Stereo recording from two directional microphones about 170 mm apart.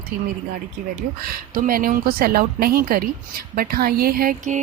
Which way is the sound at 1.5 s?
55° right (ahead or behind).